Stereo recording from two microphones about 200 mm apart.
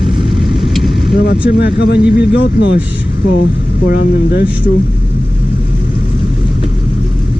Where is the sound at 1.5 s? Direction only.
55° left (ahead or behind).